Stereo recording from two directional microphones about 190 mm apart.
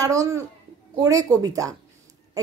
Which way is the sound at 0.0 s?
15° right (ahead or behind).